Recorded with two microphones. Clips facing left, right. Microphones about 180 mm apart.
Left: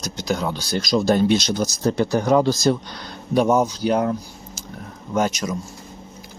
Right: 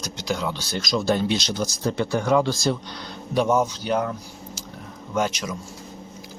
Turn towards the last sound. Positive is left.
turn(degrees=45)  # may be behind; listen again after turning